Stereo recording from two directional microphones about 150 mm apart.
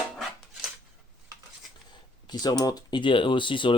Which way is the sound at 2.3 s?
25° left (ahead or behind).